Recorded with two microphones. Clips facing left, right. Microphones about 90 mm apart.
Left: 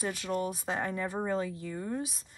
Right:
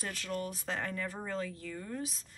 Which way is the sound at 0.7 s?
25° left (ahead or behind).